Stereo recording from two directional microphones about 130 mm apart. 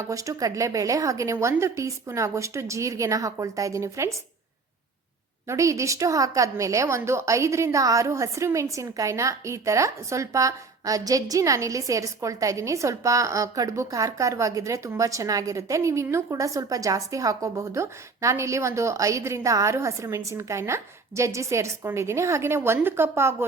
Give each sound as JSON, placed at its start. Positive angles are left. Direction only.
{"t": 0.0, "sound": "a woman's voice", "side_deg": -25}
{"t": 5.5, "sound": "a woman's voice", "side_deg": -25}